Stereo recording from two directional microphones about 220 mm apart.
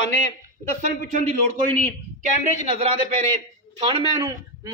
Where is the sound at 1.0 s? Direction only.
35° right (ahead or behind).